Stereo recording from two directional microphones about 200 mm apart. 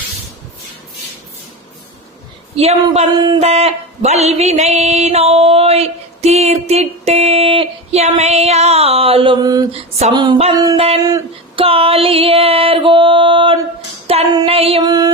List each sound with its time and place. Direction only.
2.6 s speech: 30° right (ahead or behind)
3.1 s a sound: 20° right (ahead or behind)
11.6 s music: 30° right (ahead or behind)
14.1 s child singing: 30° right (ahead or behind)